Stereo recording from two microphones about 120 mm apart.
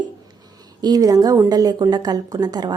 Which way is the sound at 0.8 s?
35° right (ahead or behind).